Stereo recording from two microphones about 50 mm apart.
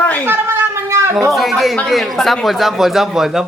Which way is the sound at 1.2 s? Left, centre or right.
Centre.